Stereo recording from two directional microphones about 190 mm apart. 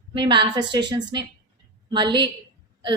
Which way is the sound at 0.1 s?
25° right (ahead or behind).